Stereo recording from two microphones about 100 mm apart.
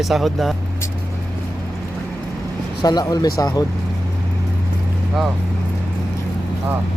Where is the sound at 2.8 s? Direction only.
40° left (ahead or behind).